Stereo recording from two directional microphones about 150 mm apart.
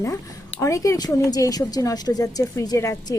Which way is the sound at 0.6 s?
20° left (ahead or behind).